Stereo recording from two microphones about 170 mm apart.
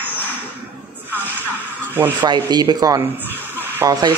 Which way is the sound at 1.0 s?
10° right (ahead or behind).